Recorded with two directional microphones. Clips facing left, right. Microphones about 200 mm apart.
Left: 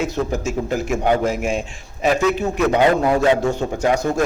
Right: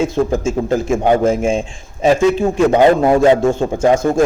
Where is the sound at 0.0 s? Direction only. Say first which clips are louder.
Right 6 dB; 30° right (ahead or behind).